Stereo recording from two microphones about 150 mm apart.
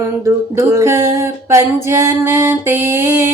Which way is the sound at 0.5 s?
20° right (ahead or behind).